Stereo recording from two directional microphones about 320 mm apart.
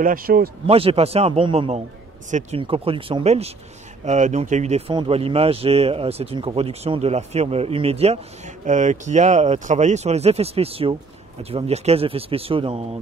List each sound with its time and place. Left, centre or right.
0.0 s speech: right